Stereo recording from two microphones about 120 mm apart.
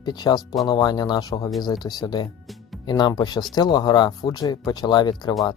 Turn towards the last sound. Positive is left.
turn(degrees=35)  # may be behind; listen again after turning